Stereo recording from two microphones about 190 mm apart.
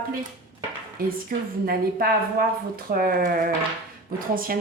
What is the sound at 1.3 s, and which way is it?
Speech, 50° right (ahead or behind).